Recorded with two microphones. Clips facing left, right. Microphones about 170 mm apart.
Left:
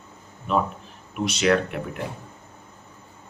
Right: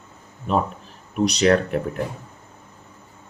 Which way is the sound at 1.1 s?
40° right (ahead or behind).